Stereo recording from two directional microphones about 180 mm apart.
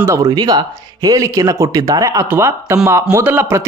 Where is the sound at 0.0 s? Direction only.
15° right (ahead or behind).